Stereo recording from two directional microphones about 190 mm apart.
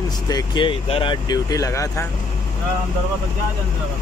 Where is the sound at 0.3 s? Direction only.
20° left (ahead or behind).